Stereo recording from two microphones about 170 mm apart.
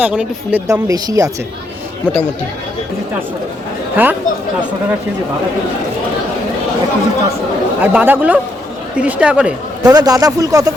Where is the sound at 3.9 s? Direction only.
10° right (ahead or behind).